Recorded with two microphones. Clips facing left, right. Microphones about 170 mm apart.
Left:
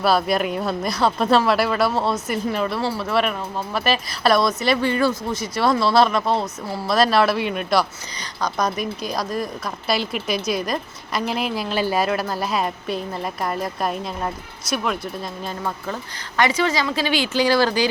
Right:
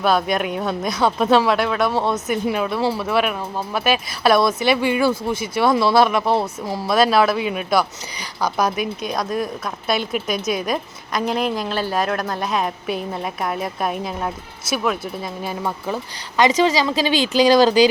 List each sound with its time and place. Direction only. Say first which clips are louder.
0.0 s a woman's voice: even; 5° left (ahead or behind); by 17.8 s 15° right (ahead or behind)